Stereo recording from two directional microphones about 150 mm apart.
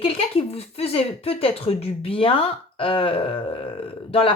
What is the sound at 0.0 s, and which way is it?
A woman's voice, 40° left (ahead or behind).